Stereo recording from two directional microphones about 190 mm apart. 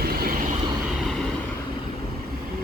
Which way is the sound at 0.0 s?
55° right (ahead or behind).